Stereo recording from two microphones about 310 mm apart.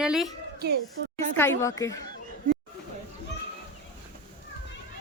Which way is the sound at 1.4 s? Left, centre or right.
Centre.